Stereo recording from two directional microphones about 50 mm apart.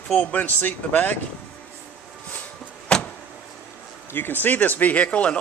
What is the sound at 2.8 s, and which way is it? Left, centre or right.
Vehicle, left.